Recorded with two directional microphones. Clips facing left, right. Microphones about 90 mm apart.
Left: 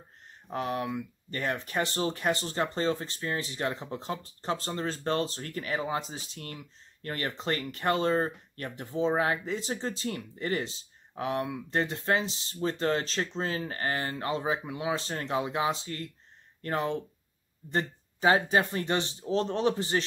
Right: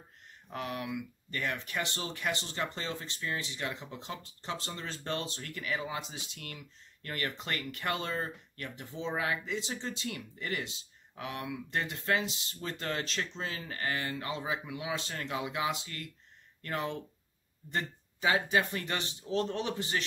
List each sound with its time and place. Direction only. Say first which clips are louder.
0.5 s speech: left 6 dB; 35° left (ahead or behind)